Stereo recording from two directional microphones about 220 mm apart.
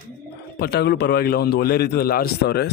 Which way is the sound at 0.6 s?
50° left (ahead or behind).